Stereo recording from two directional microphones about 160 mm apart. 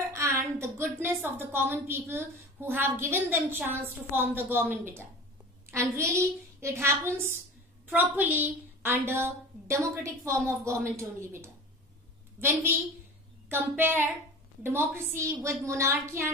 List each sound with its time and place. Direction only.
0.1 s a woman's voice: 15° right (ahead or behind)
12.4 s a woman's voice: 15° right (ahead or behind)